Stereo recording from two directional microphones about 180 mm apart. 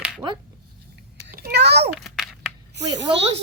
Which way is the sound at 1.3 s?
60° right (ahead or behind).